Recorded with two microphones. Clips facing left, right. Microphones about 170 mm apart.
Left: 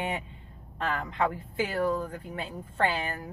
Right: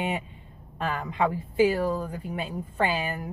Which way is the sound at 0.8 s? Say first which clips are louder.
Right 2 dB; 15° right (ahead or behind).